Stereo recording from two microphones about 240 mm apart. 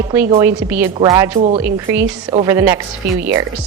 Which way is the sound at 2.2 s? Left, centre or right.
Centre.